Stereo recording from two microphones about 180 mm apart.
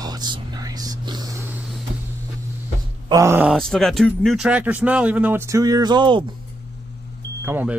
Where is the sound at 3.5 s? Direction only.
5° left (ahead or behind); by 6.2 s 25° right (ahead or behind).